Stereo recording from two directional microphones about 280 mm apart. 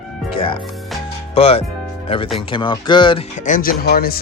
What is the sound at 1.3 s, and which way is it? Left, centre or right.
Speech, left.